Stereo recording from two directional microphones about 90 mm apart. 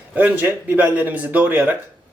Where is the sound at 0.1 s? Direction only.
15° right (ahead or behind).